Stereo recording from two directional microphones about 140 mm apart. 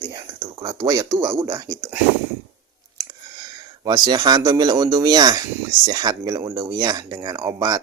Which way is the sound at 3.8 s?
30° right (ahead or behind).